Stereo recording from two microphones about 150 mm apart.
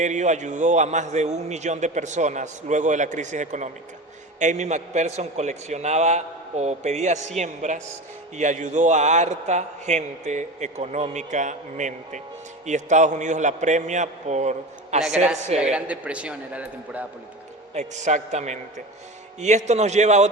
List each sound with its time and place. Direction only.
0.0 s a man's voice: 55° right (ahead or behind)
15.7 s a man's voice: 10° right (ahead or behind)
17.7 s a man's voice: 55° right (ahead or behind)